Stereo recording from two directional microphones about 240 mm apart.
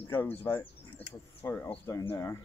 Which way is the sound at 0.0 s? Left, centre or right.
Centre.